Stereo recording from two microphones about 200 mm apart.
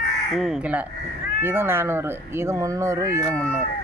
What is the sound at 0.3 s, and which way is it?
Speech, centre (ahead or behind).